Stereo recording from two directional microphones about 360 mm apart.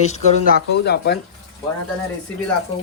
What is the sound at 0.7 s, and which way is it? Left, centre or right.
Speech, left.